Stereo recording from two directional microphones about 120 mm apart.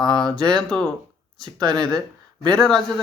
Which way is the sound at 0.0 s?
5° left (ahead or behind).